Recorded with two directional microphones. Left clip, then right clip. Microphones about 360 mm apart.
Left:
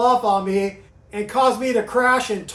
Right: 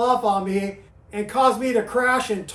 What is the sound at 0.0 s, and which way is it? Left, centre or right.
Speech, centre.